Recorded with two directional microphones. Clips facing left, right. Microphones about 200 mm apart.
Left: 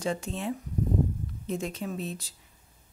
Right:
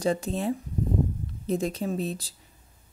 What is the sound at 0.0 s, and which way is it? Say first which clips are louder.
Speech: right 5 dB; 35° right (ahead or behind).